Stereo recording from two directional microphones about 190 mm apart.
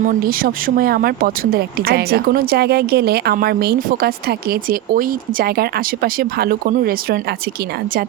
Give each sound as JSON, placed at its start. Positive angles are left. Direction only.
{"t": 0.0, "sound": "speech", "side_deg": -45}